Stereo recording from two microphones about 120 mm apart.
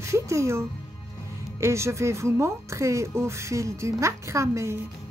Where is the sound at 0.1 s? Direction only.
25° right (ahead or behind).